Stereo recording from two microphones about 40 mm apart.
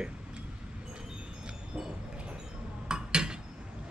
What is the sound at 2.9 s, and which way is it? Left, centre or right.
Dishes, centre.